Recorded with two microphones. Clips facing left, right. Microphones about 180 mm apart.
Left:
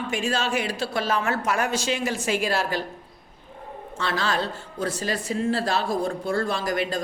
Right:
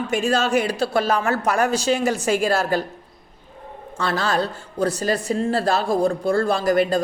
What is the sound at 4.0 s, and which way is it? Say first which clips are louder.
A woman's voice: right 4 dB; 40° right (ahead or behind).